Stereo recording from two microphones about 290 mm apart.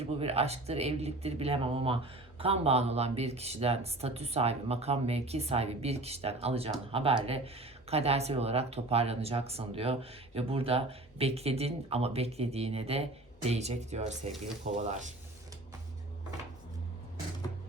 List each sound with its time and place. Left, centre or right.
0.0 s speech: right